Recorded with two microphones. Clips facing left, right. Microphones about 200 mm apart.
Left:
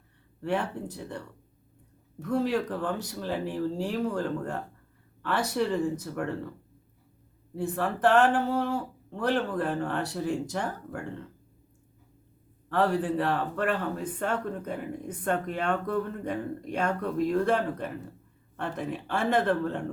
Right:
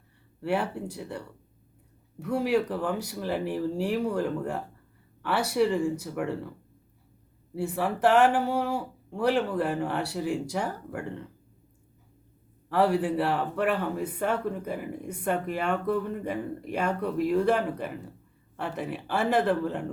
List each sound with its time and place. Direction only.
0.4 s speech: 10° right (ahead or behind)
7.5 s speech: 10° right (ahead or behind)
12.6 s speech: 10° right (ahead or behind)